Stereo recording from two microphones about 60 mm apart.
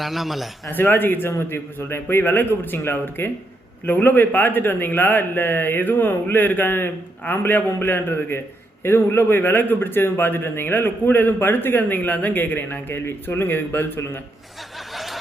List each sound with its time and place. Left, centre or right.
0.0 s a man's voice: centre
0.7 s a man's voice: left
14.9 s snicker: centre